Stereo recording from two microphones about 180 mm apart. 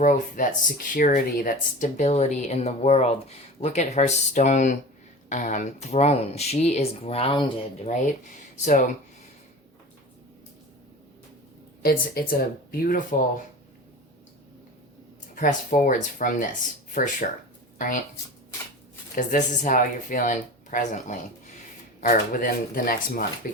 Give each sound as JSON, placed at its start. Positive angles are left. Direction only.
{"t": 0.0, "sound": "speech", "side_deg": 45}
{"t": 8.6, "sound": "speech", "side_deg": 45}
{"t": 11.8, "sound": "speech", "side_deg": 55}
{"t": 15.4, "sound": "speech", "side_deg": 45}
{"t": 19.1, "sound": "speech", "side_deg": 45}